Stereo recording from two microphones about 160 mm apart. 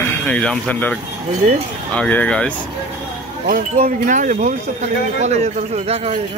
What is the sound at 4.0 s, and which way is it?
Speech, 55° right (ahead or behind).